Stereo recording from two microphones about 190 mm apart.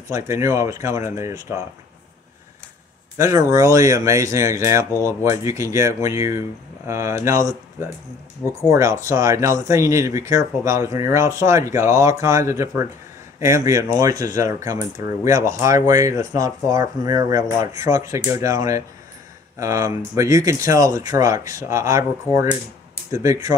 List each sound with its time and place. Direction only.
0.1 s speech: 15° right (ahead or behind)
3.2 s speech: 15° right (ahead or behind)